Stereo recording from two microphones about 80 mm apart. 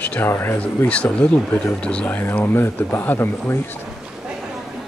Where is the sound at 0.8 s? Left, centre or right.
Centre.